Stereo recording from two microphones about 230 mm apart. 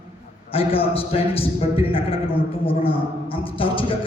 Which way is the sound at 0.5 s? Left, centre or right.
Left.